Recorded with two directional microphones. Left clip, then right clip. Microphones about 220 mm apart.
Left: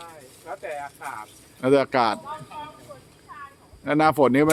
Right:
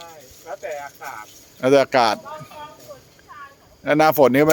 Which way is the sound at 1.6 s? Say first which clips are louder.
Right 4 dB; 20° right (ahead or behind).